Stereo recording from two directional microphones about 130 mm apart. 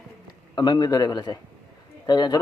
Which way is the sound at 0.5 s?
35° left (ahead or behind).